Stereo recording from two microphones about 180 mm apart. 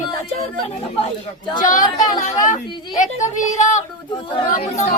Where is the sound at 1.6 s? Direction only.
45° left (ahead or behind).